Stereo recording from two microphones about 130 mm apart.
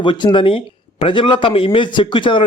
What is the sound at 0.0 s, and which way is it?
Speech, 35° left (ahead or behind).